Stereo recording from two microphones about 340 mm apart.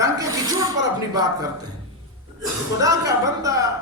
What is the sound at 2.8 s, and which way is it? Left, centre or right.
Speech, centre.